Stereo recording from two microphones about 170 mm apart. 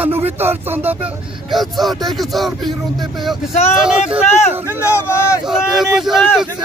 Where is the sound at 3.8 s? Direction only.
5° right (ahead or behind).